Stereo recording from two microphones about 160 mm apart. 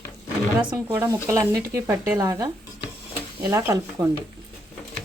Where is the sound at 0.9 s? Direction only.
15° right (ahead or behind).